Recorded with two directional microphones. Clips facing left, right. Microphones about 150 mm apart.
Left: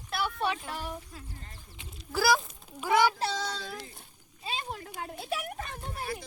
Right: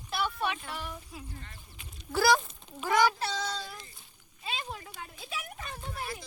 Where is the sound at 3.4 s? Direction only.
80° left.